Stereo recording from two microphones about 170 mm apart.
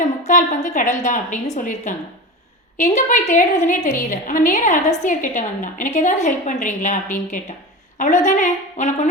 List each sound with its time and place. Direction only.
0.3 s a woman's voice: 45° left (ahead or behind)